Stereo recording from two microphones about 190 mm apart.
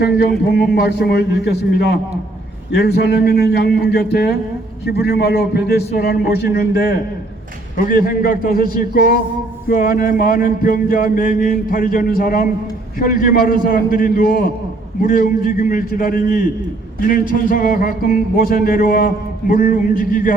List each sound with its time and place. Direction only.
0.0 s a man's voice: 60° left (ahead or behind); by 20.3 s 45° left (ahead or behind)